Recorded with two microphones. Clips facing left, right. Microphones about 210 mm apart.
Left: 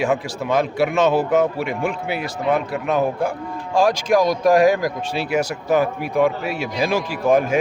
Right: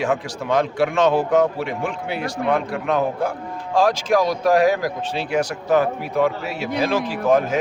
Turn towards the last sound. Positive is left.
turn(degrees=10)  # may be behind; listen again after turning